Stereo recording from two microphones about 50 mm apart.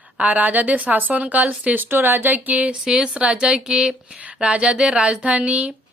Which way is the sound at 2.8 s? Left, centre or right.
Centre.